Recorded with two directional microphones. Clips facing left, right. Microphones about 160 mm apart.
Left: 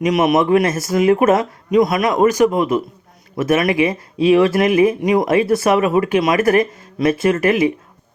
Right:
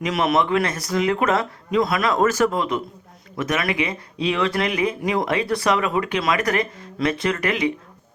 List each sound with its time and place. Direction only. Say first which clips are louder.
0.0 s speech: left 6 dB; 20° left (ahead or behind)